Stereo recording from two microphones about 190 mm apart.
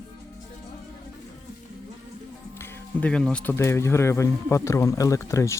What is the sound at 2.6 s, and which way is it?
Speech, 10° left (ahead or behind).